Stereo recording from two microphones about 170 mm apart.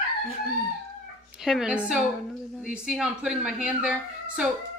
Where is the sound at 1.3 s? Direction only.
5° right (ahead or behind).